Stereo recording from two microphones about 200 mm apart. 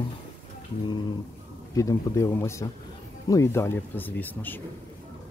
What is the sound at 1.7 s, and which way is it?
Speech, 15° left (ahead or behind).